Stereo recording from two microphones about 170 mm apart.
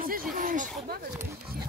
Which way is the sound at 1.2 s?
15° right (ahead or behind).